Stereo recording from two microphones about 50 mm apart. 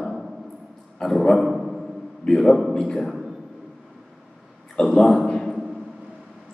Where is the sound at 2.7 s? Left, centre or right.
Centre.